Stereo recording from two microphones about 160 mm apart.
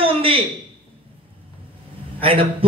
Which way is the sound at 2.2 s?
35° right (ahead or behind).